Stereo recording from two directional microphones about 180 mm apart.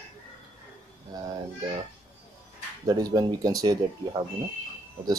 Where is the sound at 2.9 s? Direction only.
20° right (ahead or behind).